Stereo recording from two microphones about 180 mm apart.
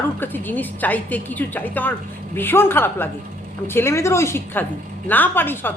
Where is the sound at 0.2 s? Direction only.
10° left (ahead or behind).